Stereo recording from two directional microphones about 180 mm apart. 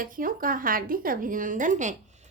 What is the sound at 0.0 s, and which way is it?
A woman's voice, 50° right (ahead or behind).